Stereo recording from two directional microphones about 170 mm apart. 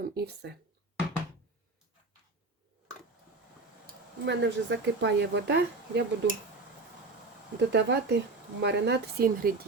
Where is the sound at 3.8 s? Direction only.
90° right.